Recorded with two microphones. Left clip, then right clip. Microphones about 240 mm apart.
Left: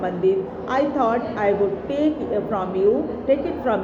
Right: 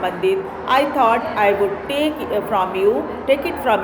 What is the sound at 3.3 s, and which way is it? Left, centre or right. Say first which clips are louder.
Speech: right 4 dB; right.